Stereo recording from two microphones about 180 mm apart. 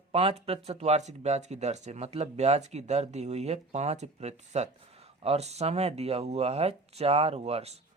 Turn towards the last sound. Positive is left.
turn(degrees=-35)  # may be behind; listen again after turning